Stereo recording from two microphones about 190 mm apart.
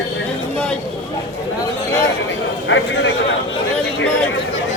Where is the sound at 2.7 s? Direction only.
85° left.